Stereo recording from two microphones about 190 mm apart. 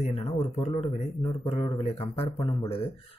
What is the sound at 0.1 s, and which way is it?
A man's voice, 30° left (ahead or behind).